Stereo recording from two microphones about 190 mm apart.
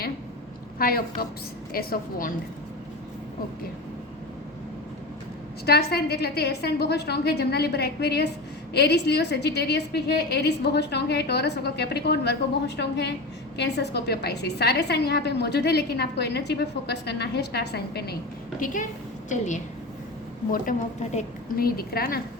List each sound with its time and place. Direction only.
0.8 s a woman's voice: 50° left (ahead or behind)
5.6 s a woman's voice: 55° left (ahead or behind)
18.6 s a woman's voice: 45° left (ahead or behind)
21.6 s a woman's voice: 50° left (ahead or behind)